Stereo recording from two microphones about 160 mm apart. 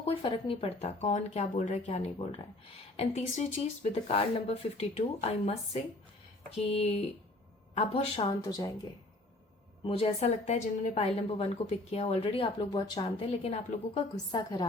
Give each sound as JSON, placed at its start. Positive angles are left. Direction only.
{"t": 0.0, "sound": "a woman's voice", "side_deg": 35}
{"t": 8.4, "sound": "a woman's voice", "side_deg": 20}
{"t": 9.8, "sound": "a woman's voice", "side_deg": 35}
{"t": 13.9, "sound": "a woman's voice", "side_deg": 25}